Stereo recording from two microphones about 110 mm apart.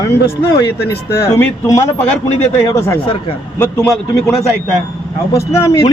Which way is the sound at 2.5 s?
25° left (ahead or behind).